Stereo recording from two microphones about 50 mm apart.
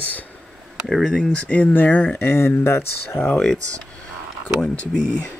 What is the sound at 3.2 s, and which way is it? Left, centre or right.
Speech, centre.